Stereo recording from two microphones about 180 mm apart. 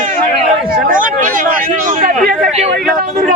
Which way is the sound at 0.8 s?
45° right (ahead or behind).